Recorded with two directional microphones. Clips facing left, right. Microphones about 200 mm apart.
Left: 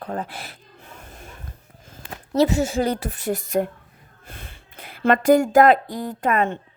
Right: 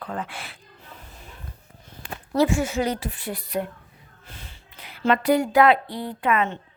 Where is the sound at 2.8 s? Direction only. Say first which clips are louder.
Left 3 dB; 45° left (ahead or behind).